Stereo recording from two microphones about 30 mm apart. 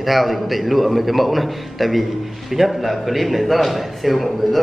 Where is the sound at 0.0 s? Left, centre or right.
Centre.